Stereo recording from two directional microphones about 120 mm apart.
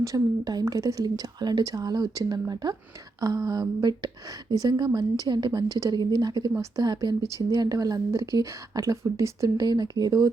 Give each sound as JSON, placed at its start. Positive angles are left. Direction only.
{"t": 0.0, "sound": "speech", "side_deg": -30}